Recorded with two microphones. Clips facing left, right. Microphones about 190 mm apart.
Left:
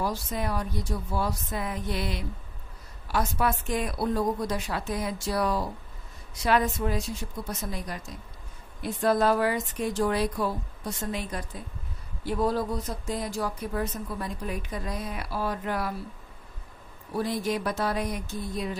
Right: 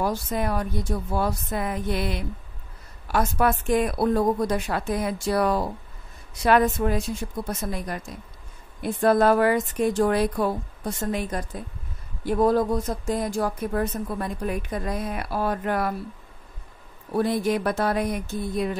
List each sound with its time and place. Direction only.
0.0 s speech: 55° right (ahead or behind)
17.1 s speech: 55° right (ahead or behind)